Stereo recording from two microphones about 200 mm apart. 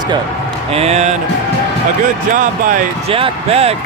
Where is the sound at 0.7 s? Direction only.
30° right (ahead or behind).